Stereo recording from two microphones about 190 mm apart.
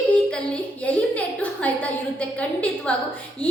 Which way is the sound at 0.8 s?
10° left (ahead or behind).